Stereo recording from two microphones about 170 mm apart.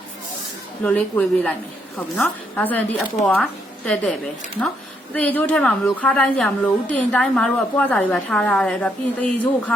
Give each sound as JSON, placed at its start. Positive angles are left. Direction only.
{"t": 0.8, "sound": "a woman's voice", "side_deg": 10}
{"t": 5.1, "sound": "a woman's voice", "side_deg": 10}